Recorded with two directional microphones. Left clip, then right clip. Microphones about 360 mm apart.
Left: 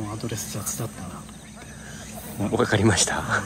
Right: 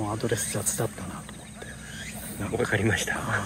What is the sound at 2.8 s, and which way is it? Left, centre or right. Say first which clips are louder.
Speech: left 5 dB; centre.